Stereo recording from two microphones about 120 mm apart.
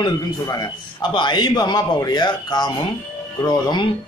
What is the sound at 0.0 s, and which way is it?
Speech, 35° left (ahead or behind).